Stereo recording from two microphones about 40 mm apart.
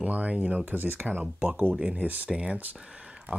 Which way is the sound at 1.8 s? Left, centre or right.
Right.